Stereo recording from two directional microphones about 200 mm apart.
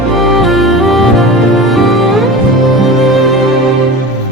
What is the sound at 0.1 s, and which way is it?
Music, centre (ahead or behind).